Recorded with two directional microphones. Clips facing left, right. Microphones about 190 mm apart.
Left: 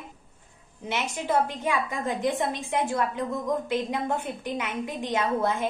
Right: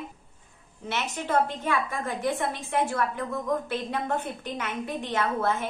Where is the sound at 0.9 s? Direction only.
10° left (ahead or behind).